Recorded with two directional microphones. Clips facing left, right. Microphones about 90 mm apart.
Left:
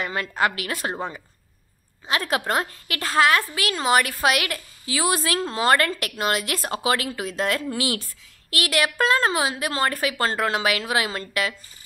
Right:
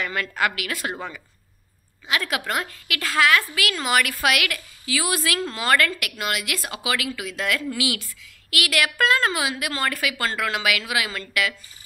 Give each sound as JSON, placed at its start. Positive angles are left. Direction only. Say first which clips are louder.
{"t": 0.0, "sound": "a woman's voice", "louder": "left 1 dB", "side_deg": 30}